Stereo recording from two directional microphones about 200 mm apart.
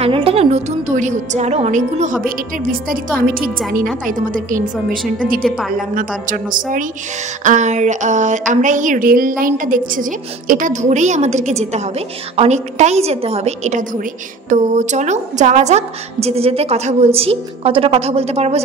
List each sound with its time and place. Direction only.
0.0 s a woman's voice: 30° right (ahead or behind)
5.8 s a woman's voice: 45° right (ahead or behind)